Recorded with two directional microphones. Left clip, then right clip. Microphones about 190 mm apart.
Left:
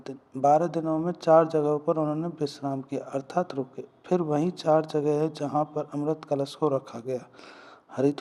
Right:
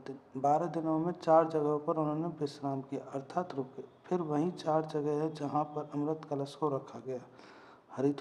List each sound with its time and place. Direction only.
0.0 s speech: 25° left (ahead or behind)